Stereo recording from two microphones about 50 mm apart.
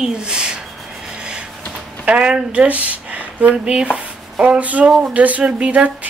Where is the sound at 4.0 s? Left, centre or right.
Right.